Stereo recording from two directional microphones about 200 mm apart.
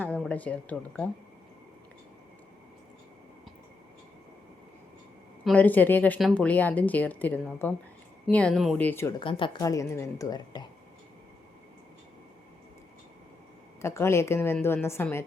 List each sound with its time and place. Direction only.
0.0 s speech: 5° left (ahead or behind)
5.5 s a woman's voice: 10° left (ahead or behind)
9.2 s a woman's voice: 25° left (ahead or behind)
13.8 s a woman's voice: 15° left (ahead or behind)